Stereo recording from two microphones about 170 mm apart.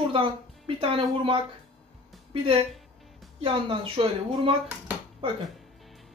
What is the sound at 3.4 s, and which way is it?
Speech, 30° right (ahead or behind).